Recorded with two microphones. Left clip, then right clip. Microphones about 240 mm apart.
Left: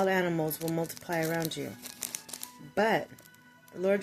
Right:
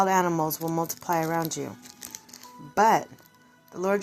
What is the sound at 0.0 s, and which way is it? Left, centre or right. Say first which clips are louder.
Speech: right 5 dB; centre.